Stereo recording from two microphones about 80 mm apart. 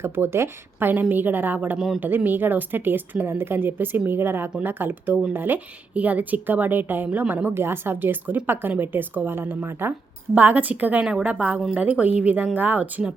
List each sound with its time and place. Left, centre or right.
0.0 s speech: right